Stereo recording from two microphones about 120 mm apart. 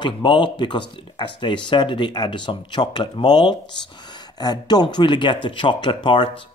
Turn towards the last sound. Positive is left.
turn(degrees=40)  # may be behind; listen again after turning